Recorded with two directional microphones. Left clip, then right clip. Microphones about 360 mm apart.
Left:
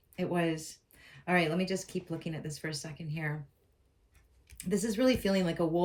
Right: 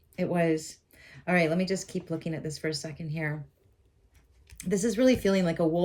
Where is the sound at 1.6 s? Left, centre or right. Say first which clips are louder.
Right 3 dB; centre.